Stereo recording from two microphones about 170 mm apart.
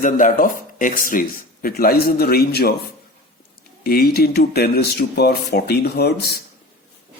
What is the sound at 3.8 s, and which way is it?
Speech, 65° left (ahead or behind).